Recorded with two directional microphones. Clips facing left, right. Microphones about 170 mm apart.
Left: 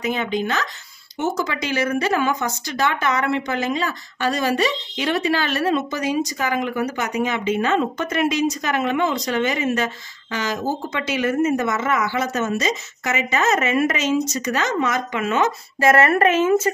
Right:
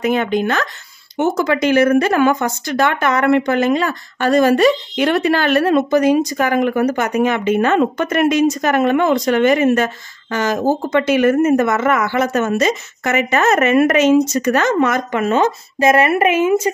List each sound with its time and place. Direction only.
0.0 s speech: 55° right (ahead or behind)
15.8 s speech: 15° right (ahead or behind)